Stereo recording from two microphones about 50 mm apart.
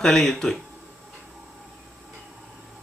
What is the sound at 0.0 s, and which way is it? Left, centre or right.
Speech, centre.